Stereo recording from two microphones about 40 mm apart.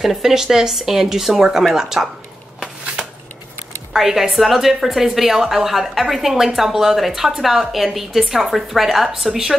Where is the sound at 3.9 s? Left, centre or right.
Centre.